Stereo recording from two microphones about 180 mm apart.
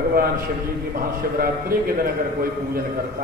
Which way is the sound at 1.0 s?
55° right (ahead or behind).